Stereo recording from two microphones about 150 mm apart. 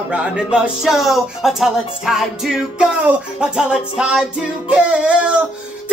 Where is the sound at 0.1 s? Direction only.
5° right (ahead or behind).